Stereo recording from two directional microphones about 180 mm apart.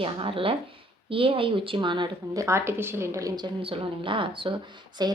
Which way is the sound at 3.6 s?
30° right (ahead or behind).